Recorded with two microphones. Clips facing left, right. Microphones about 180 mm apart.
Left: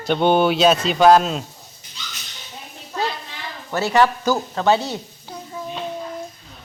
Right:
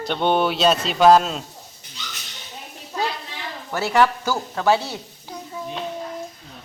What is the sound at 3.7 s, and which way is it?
Speech, 10° right (ahead or behind).